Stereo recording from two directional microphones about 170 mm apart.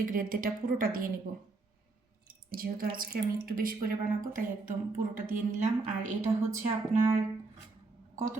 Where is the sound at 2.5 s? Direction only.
60° right (ahead or behind).